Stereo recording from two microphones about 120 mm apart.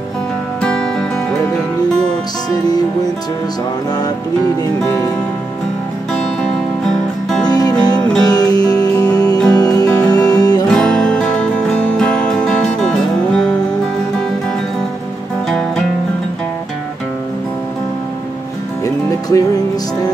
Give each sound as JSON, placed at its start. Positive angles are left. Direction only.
{"t": 0.6, "sound": "music", "side_deg": 5}
{"t": 7.4, "sound": "music", "side_deg": 30}
{"t": 10.7, "sound": "music", "side_deg": 5}
{"t": 19.3, "sound": "music", "side_deg": 25}